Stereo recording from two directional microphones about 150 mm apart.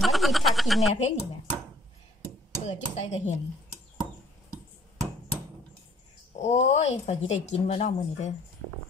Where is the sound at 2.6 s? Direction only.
45° left (ahead or behind).